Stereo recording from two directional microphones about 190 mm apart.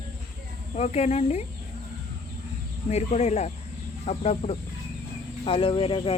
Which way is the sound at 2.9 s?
35° left (ahead or behind).